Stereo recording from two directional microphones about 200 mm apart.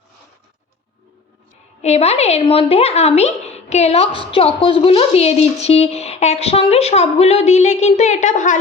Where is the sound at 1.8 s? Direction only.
35° left (ahead or behind).